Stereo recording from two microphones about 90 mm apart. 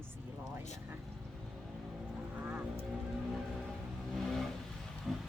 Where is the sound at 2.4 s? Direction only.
15° right (ahead or behind).